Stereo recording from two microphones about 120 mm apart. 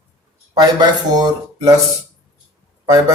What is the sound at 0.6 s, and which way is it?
Speech, 35° right (ahead or behind).